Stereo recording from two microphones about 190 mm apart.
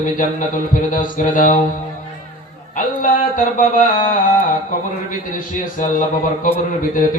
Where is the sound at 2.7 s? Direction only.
45° left (ahead or behind).